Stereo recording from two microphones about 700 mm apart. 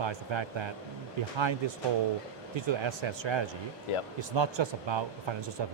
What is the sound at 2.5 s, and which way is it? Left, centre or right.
Speech, right.